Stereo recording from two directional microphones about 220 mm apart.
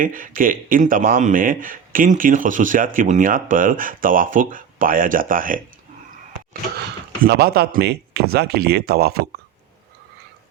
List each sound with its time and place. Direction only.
0.0 s speech: 40° right (ahead or behind)
7.3 s speech: 45° right (ahead or behind)